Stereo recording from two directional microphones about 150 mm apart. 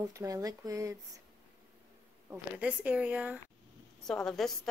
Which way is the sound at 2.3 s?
10° right (ahead or behind).